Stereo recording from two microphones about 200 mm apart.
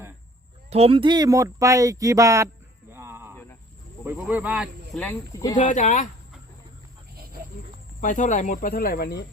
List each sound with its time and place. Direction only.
0.7 s speech: 30° right (ahead or behind)
2.9 s a sound: 10° right (ahead or behind)
4.0 s speech: 10° right (ahead or behind)
4.9 s speech: 10° left (ahead or behind)
5.5 s speech: 40° left (ahead or behind)
8.0 s speech: 40° left (ahead or behind)